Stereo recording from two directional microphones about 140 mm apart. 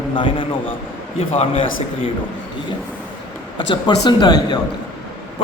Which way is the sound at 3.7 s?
30° left (ahead or behind).